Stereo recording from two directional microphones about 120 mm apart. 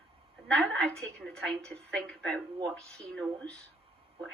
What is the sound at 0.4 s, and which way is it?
Speech, 5° left (ahead or behind).